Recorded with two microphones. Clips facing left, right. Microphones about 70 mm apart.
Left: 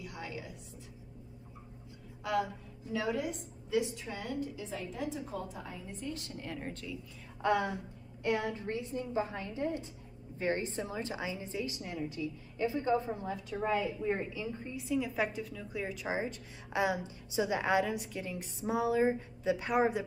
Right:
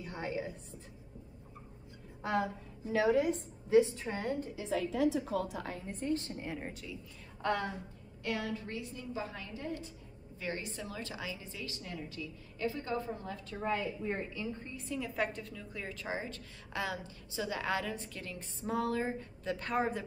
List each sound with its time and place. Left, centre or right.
0.0 s a sound: right
2.2 s a woman's voice: right
2.9 s a woman's voice: right
3.7 s a woman's voice: right
4.6 s a woman's voice: right
6.1 s a woman's voice: right
6.4 s speech: centre
7.4 s a woman's voice: centre